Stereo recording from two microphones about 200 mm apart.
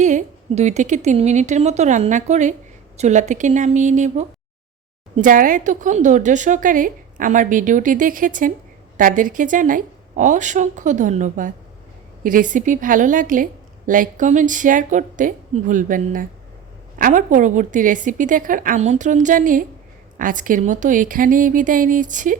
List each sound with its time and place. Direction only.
0.0 s a woman's voice: 35° right (ahead or behind)